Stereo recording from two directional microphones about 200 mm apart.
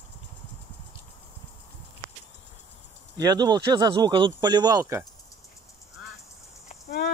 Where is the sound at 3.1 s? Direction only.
20° right (ahead or behind).